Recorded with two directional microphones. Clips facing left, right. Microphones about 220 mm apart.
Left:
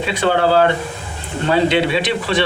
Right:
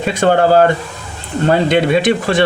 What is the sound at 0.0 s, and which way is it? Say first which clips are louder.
Speech: right 4 dB; 45° right (ahead or behind).